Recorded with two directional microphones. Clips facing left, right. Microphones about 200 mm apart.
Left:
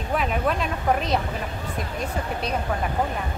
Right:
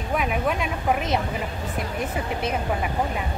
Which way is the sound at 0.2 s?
5° right (ahead or behind).